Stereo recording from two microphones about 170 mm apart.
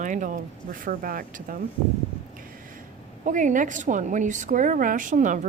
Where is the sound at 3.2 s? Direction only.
50° right (ahead or behind).